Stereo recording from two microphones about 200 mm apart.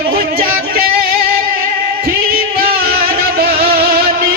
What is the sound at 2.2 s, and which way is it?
Music, 45° right (ahead or behind).